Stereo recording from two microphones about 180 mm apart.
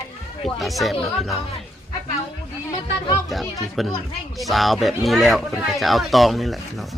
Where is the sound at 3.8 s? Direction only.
Centre (ahead or behind).